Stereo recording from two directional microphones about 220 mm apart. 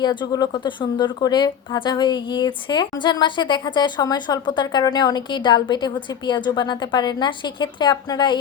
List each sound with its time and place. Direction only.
0.0 s a woman's voice: 20° left (ahead or behind)